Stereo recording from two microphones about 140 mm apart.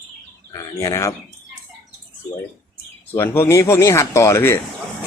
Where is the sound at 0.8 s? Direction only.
20° left (ahead or behind).